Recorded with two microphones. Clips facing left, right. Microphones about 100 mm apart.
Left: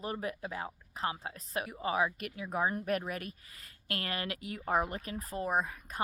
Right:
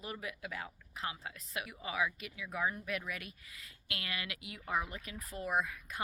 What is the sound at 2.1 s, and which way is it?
A woman's voice, 50° left (ahead or behind).